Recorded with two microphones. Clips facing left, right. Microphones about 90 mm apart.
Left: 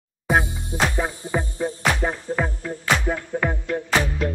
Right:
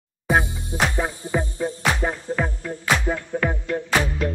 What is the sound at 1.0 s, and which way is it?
Music, 5° left (ahead or behind).